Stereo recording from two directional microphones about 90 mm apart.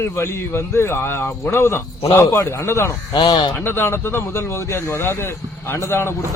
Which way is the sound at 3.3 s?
65° left (ahead or behind).